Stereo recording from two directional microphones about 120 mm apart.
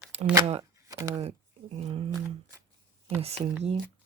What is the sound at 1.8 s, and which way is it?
Speech, 50° right (ahead or behind).